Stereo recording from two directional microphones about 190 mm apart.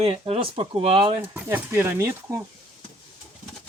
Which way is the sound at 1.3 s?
10° right (ahead or behind).